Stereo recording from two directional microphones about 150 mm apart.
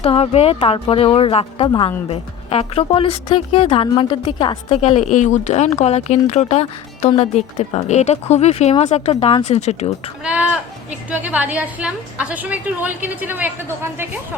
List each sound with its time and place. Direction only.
0.0 s speech: 40° left (ahead or behind)
5.1 s speech: 55° left (ahead or behind)
10.2 s a woman's voice: 10° right (ahead or behind)